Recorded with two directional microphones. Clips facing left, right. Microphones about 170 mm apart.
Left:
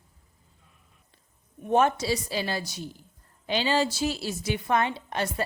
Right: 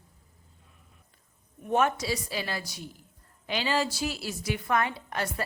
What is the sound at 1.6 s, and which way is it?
A woman's voice, 30° left (ahead or behind).